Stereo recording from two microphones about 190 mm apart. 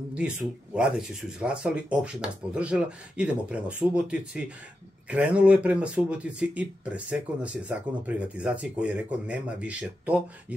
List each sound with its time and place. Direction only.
0.1 s speech: 5° right (ahead or behind)